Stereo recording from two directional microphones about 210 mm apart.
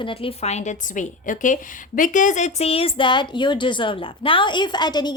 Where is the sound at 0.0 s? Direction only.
25° left (ahead or behind).